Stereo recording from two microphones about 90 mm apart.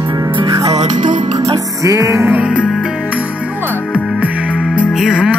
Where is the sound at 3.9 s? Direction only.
15° right (ahead or behind).